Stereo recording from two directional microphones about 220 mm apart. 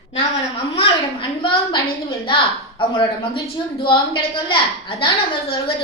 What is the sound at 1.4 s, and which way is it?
A woman's voice, 20° left (ahead or behind).